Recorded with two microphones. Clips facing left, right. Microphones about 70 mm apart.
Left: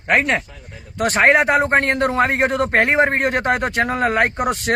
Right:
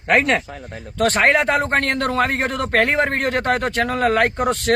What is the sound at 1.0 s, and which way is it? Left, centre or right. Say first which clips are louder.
A man's voice: left 2 dB; centre.